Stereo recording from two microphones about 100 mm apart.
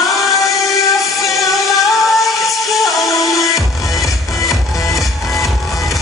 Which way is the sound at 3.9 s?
35° left (ahead or behind).